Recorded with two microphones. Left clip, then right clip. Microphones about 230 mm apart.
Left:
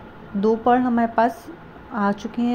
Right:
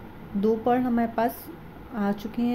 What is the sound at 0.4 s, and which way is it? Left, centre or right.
A woman's voice, centre.